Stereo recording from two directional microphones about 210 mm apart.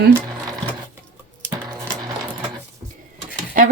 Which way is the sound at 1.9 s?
15° right (ahead or behind).